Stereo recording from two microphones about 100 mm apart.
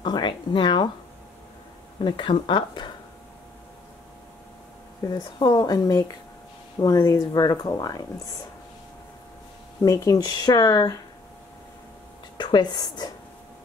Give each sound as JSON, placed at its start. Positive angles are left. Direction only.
{"t": 0.0, "sound": "speech", "side_deg": 50}
{"t": 2.0, "sound": "speech", "side_deg": 50}
{"t": 5.1, "sound": "speech", "side_deg": 45}
{"t": 9.8, "sound": "speech", "side_deg": 40}
{"t": 12.4, "sound": "speech", "side_deg": 50}